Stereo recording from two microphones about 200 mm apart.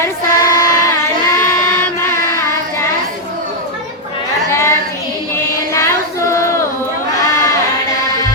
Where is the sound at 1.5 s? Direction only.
15° left (ahead or behind).